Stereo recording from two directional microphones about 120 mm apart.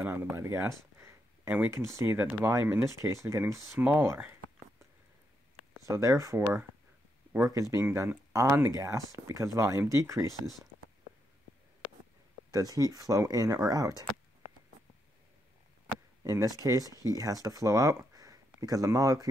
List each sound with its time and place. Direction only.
0.0 s speech: 15° right (ahead or behind)
5.8 s speech: 30° right (ahead or behind)
12.4 s speech: 30° right (ahead or behind)
16.3 s speech: 30° right (ahead or behind)